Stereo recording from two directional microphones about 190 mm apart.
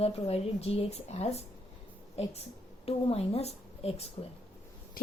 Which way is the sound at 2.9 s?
30° left (ahead or behind).